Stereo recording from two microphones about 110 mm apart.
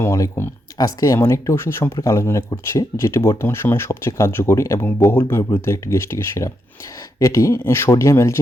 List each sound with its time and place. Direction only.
0.0 s speech: 25° left (ahead or behind)